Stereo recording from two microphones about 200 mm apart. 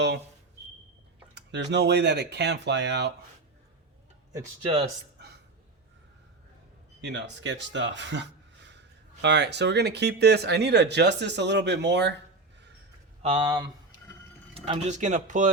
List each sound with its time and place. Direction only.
1.4 s speech: 60° right (ahead or behind)
7.0 s speech: 60° right (ahead or behind)
13.2 s speech: 25° right (ahead or behind)